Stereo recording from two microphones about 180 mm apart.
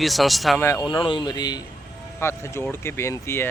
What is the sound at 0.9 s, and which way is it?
Speech, 25° left (ahead or behind).